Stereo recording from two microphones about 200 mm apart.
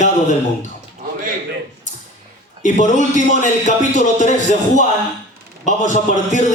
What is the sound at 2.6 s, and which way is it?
Speech, 40° left (ahead or behind).